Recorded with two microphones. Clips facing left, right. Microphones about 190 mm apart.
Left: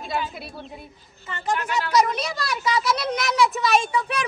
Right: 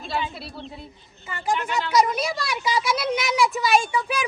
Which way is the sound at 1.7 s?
Centre (ahead or behind).